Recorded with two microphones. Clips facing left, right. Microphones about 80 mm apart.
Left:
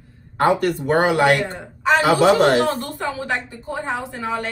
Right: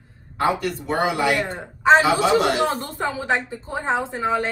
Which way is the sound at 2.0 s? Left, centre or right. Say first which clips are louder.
Left 3 dB; left.